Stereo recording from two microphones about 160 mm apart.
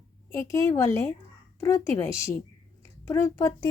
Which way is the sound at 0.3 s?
20° left (ahead or behind).